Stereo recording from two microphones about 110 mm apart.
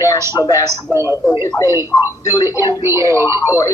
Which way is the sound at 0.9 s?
25° right (ahead or behind).